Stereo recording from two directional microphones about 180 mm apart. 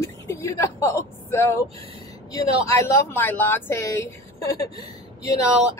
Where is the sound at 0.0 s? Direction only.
15° left (ahead or behind).